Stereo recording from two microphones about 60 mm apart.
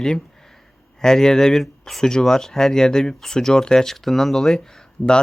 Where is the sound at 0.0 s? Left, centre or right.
Centre.